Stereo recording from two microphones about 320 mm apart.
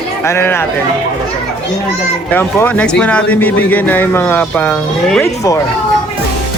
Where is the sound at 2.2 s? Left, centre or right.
Centre.